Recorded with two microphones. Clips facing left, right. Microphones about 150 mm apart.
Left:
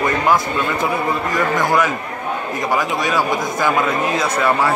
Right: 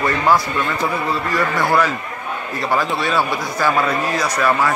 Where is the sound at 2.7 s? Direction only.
15° left (ahead or behind).